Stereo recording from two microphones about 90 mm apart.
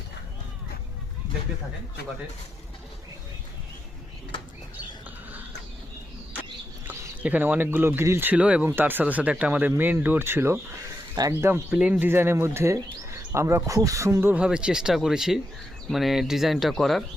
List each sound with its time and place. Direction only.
7.2 s speech: 20° right (ahead or behind)
8.3 s speech: 15° right (ahead or behind)
11.1 s speech: 45° right (ahead or behind)
11.3 s speech: 30° right (ahead or behind)
11.7 s speech: 15° right (ahead or behind)
14.3 s speech: 10° right (ahead or behind)